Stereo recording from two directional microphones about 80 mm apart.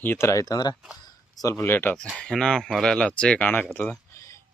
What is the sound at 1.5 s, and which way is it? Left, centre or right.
Speech, left.